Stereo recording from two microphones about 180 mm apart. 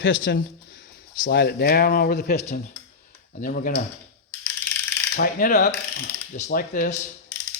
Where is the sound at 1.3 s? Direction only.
65° left (ahead or behind).